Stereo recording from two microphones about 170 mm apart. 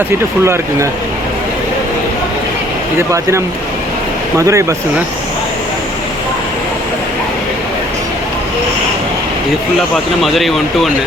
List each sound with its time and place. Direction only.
0.4 s speech: 15° right (ahead or behind)
3.1 s speech: 15° right (ahead or behind)
9.9 s speech: centre (ahead or behind)